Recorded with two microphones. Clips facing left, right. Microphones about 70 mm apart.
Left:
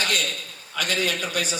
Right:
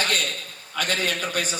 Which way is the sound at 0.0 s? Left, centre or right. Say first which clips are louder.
Even; right.